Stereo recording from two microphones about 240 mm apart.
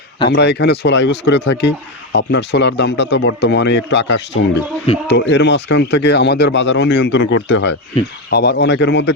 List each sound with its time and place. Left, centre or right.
0.3 s speech: left